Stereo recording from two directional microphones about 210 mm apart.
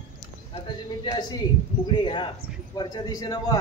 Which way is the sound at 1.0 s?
20° left (ahead or behind).